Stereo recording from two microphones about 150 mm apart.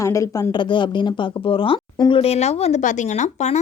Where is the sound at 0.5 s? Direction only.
30° left (ahead or behind).